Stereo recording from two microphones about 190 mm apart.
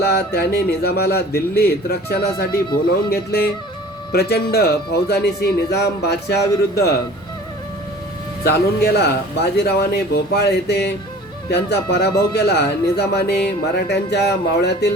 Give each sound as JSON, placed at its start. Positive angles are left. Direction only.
{"t": 0.0, "sound": "speech", "side_deg": 55}
{"t": 4.1, "sound": "speech", "side_deg": 55}
{"t": 8.4, "sound": "speech", "side_deg": 55}